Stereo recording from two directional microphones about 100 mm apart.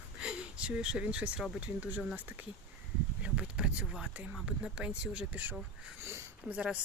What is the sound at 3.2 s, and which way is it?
Speech, 10° right (ahead or behind).